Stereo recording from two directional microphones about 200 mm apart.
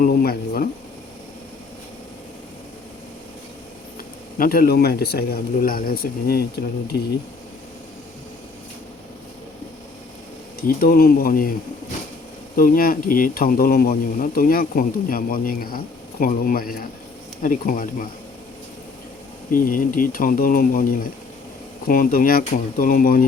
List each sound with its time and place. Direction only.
0.0 s speech: 50° left (ahead or behind)
4.4 s speech: 45° left (ahead or behind)
10.6 s speech: 45° left (ahead or behind)
12.5 s speech: 45° left (ahead or behind)
19.5 s speech: 45° left (ahead or behind)